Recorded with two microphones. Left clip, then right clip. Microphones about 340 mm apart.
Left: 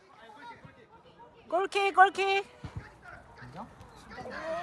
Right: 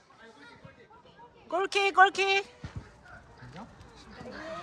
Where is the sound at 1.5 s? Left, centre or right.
Centre.